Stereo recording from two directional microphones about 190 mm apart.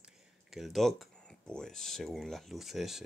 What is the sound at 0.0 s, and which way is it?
Speech, centre (ahead or behind).